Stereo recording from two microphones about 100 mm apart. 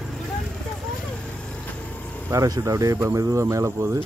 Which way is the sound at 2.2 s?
35° right (ahead or behind).